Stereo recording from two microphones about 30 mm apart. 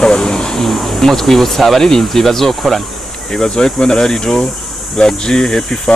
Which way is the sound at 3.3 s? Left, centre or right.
Left.